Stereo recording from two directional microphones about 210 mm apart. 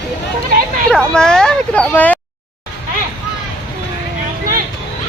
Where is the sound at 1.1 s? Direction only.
5° left (ahead or behind).